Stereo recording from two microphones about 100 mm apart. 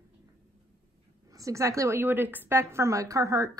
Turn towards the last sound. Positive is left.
turn(degrees=-35)  # may be behind; listen again after turning